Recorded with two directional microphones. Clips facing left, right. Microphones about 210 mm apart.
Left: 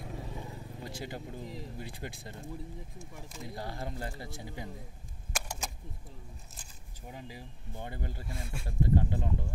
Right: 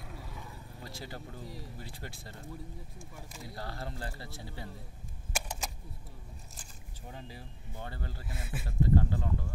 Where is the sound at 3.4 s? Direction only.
20° left (ahead or behind).